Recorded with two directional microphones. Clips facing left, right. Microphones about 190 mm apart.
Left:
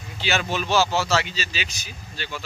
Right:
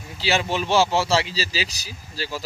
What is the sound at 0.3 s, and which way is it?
A man's voice, 30° right (ahead or behind).